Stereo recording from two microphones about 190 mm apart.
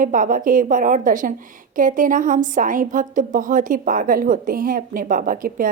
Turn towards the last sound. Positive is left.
turn(degrees=-45)  # may be behind; listen again after turning